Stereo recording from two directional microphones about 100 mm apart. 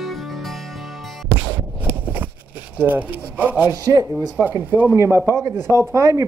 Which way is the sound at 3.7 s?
40° right (ahead or behind).